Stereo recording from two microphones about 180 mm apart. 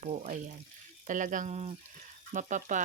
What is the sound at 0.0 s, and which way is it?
Speech, 40° right (ahead or behind).